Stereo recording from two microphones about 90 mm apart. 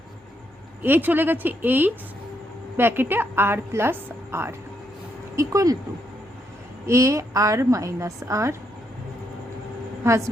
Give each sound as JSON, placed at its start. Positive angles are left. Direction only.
{"t": 0.8, "sound": "a woman's voice", "side_deg": -20}
{"t": 6.8, "sound": "a woman's voice", "side_deg": -35}
{"t": 10.0, "sound": "a woman's voice", "side_deg": -35}